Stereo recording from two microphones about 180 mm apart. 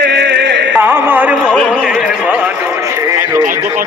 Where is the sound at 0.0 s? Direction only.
70° right (ahead or behind).